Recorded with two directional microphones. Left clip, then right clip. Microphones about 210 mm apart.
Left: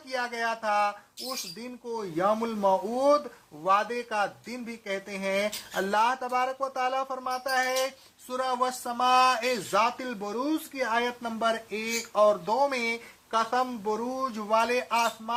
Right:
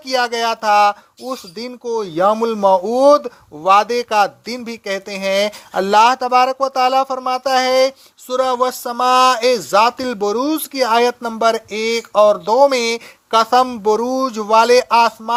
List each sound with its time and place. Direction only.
0.0 s speech: 45° right (ahead or behind)